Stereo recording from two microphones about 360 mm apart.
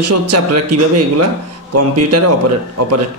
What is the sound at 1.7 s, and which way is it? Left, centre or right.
Speech, right.